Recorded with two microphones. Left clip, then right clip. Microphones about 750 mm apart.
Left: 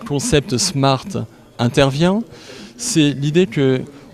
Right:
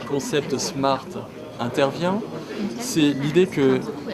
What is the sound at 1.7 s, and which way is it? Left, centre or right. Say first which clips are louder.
Speech: left 6 dB; left.